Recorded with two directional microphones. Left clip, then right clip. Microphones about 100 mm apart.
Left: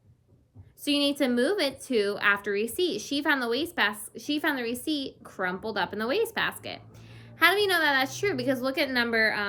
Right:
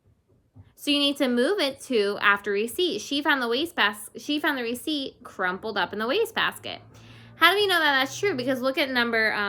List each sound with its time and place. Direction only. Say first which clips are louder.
0.9 s speech: right 2 dB; 30° right (ahead or behind)